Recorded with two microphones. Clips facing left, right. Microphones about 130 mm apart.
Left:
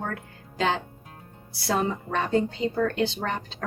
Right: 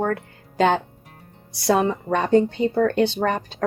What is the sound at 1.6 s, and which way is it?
A woman's voice, 70° right (ahead or behind).